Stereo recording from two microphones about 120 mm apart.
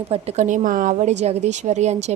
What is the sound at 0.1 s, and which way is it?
A woman's voice, 80° right.